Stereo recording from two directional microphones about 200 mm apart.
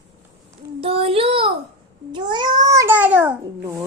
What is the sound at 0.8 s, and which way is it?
Child singing, 30° right (ahead or behind).